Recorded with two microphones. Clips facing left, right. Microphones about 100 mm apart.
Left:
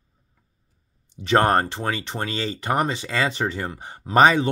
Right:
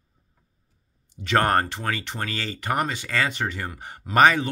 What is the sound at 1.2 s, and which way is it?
Speech, 25° left (ahead or behind).